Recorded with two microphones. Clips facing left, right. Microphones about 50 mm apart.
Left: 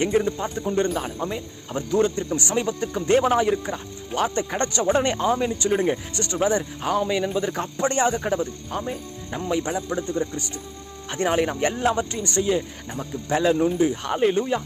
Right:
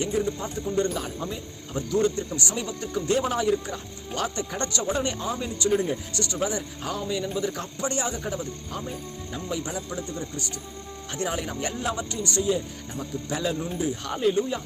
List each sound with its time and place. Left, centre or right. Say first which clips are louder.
0.0 s speech: left 5 dB; left
5.2 s speech: left 8 dB; left
5.5 s speech: left 3 dB; left
6.9 s speech: left 6 dB; left
12.4 s speech: left 3 dB; left
12.9 s speech: left 6 dB; left